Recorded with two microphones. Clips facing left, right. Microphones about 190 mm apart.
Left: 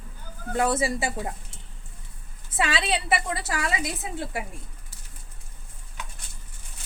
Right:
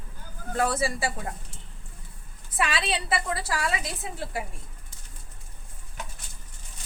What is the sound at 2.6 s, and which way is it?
A woman's voice, 25° left (ahead or behind).